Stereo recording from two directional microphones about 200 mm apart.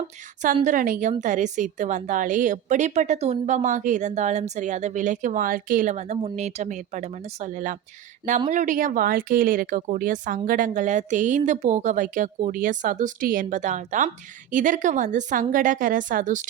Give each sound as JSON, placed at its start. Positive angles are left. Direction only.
{"t": 0.6, "sound": "a woman's voice", "side_deg": -40}